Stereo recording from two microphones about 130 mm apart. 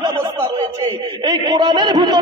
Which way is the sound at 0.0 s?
35° right (ahead or behind).